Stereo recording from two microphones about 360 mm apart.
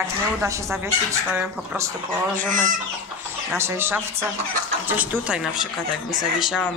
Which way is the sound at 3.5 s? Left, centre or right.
Centre.